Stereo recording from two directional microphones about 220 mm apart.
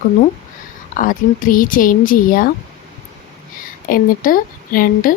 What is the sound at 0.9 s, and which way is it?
A woman's voice, 40° left (ahead or behind).